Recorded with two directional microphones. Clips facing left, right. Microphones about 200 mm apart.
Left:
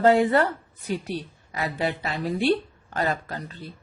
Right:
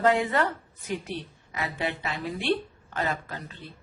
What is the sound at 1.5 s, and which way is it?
Speech, 35° left (ahead or behind).